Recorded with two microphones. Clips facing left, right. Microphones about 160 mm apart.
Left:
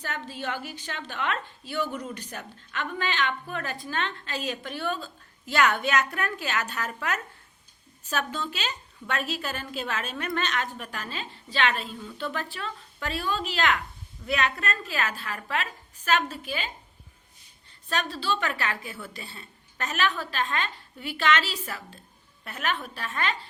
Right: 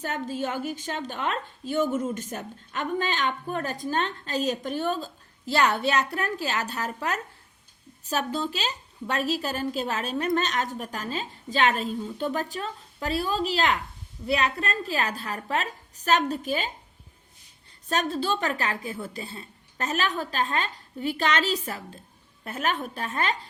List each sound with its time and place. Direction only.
0.0 s a woman's voice: 45° right (ahead or behind)
17.8 s a woman's voice: 40° right (ahead or behind)